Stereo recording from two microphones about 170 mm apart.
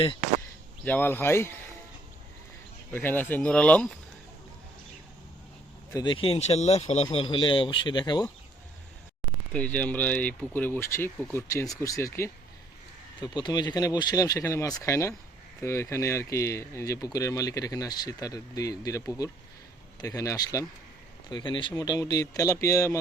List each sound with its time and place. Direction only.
0.9 s speech: 10° left (ahead or behind)
2.9 s speech: 10° left (ahead or behind)
5.9 s speech: 25° left (ahead or behind)
9.5 s speech: 10° left (ahead or behind)